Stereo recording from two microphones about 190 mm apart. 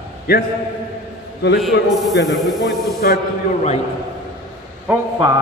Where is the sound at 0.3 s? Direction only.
50° left (ahead or behind).